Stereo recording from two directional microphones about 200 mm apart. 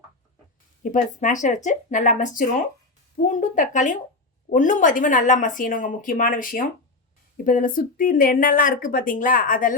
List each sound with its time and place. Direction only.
0.8 s speech: 40° left (ahead or behind)